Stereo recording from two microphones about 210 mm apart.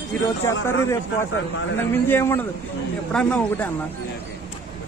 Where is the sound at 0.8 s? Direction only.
15° left (ahead or behind).